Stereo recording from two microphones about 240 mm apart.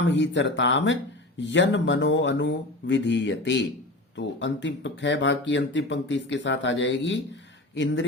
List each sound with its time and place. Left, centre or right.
0.0 s speech: left